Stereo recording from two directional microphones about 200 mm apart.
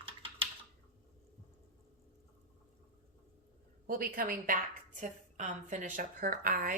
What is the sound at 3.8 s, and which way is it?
A woman's voice, 50° right (ahead or behind).